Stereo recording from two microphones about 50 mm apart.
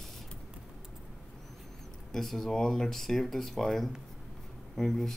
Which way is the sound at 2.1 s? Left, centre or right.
Centre.